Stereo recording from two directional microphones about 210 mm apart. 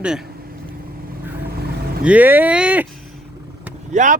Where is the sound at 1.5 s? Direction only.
45° right (ahead or behind).